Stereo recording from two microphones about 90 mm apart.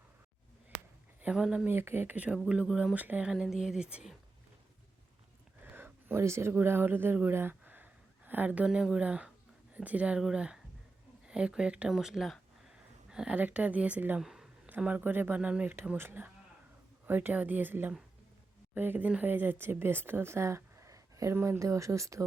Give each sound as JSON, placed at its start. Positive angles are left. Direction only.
{"t": 1.2, "sound": "speech", "side_deg": -10}
{"t": 1.6, "sound": "speech", "side_deg": -25}
{"t": 2.9, "sound": "speech", "side_deg": -20}
{"t": 3.3, "sound": "speech", "side_deg": -5}
{"t": 5.6, "sound": "speech", "side_deg": -25}
{"t": 13.1, "sound": "a sound", "side_deg": -10}
{"t": 13.3, "sound": "speech", "side_deg": -15}
{"t": 14.2, "sound": "a sound", "side_deg": -5}
{"t": 14.8, "sound": "a woman's voice", "side_deg": -15}